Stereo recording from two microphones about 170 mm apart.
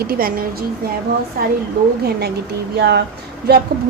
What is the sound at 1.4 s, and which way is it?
Speech, 60° right (ahead or behind).